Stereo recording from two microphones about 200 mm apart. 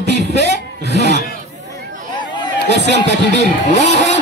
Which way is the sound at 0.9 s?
60° right (ahead or behind).